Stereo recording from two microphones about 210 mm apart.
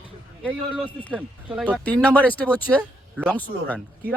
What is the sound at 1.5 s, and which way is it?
Speech, 5° right (ahead or behind).